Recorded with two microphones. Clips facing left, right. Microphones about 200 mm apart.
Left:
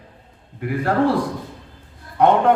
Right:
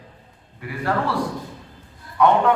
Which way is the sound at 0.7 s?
50° left (ahead or behind).